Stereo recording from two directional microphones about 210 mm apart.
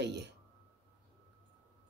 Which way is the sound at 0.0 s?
55° right (ahead or behind).